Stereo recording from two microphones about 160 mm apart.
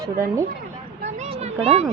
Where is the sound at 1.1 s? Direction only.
40° right (ahead or behind).